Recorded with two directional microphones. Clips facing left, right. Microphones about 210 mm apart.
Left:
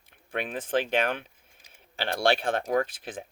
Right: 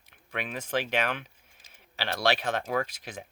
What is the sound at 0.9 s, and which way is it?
Speech, 50° left (ahead or behind).